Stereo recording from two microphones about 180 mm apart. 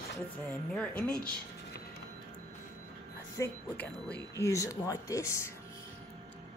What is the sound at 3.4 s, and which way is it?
Speech, 10° left (ahead or behind).